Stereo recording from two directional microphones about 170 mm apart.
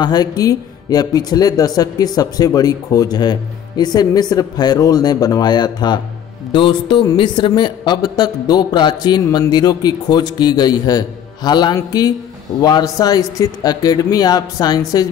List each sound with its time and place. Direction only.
0.0 s speech: 25° left (ahead or behind)